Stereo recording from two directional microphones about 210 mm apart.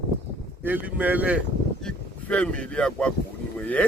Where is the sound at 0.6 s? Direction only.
10° right (ahead or behind).